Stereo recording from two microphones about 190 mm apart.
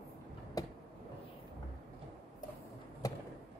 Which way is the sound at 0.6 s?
20° left (ahead or behind).